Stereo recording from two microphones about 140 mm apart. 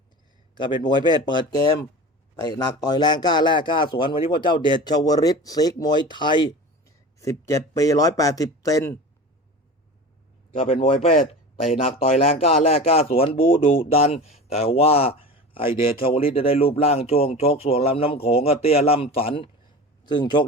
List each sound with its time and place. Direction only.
0.5 s a man's voice: 30° left (ahead or behind)
10.6 s a man's voice: 40° left (ahead or behind)
20.1 s a man's voice: 30° left (ahead or behind)